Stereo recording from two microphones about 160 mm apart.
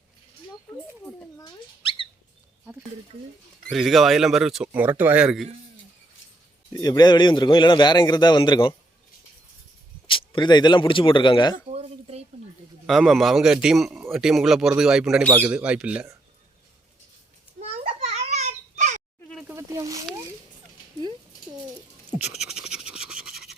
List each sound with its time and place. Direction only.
1.4 s rodents: 30° left (ahead or behind)
3.7 s speech: centre (ahead or behind)
6.7 s a man's voice: 25° left (ahead or behind)
10.1 s speech: 30° left (ahead or behind)
11.5 s a sound: 40° right (ahead or behind)
12.9 s speech: centre (ahead or behind)
17.6 s a sound: 40° right (ahead or behind)
19.5 s a sound: 20° right (ahead or behind)
22.3 s scratch: centre (ahead or behind)